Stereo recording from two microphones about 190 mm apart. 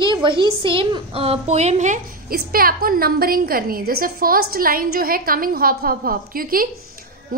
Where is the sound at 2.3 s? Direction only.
50° right (ahead or behind).